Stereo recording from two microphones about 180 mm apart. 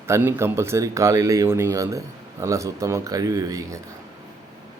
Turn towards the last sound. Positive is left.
turn(degrees=-20)  # may be behind; listen again after turning